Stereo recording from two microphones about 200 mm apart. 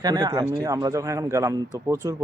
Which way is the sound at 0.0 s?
20° right (ahead or behind).